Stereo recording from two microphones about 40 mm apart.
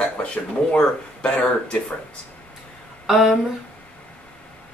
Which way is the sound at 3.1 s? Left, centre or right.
Centre.